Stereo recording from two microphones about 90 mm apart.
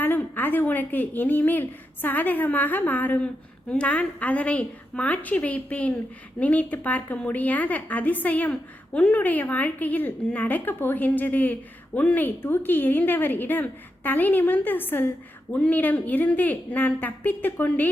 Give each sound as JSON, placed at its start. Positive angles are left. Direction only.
{"t": 0.0, "sound": "a woman's voice", "side_deg": 20}